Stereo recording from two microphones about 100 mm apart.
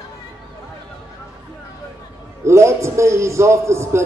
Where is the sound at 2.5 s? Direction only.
30° right (ahead or behind).